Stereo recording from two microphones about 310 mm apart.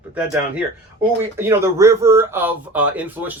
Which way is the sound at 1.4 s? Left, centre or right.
Centre.